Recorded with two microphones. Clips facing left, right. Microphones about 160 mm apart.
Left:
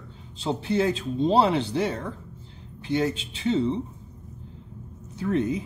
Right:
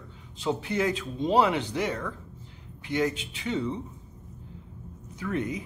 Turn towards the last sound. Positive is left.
turn(degrees=30)  # may be behind; listen again after turning